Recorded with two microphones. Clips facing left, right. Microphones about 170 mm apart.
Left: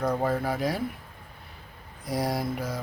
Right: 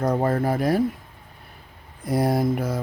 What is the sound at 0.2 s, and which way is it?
Speech, 50° right (ahead or behind).